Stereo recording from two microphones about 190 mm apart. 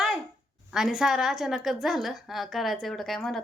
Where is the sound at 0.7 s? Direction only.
Centre (ahead or behind).